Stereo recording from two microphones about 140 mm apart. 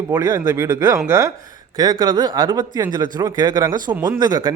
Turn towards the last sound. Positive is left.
turn(degrees=-30)  # may be behind; listen again after turning